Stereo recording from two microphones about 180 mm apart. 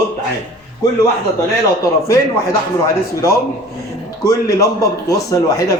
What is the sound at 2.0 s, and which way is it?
Speech, 15° left (ahead or behind).